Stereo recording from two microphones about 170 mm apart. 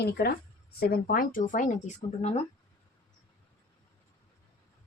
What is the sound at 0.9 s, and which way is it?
Speech, 55° left (ahead or behind).